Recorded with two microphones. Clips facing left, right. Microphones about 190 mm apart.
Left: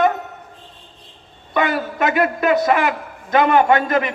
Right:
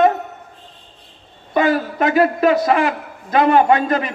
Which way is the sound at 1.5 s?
35° right (ahead or behind).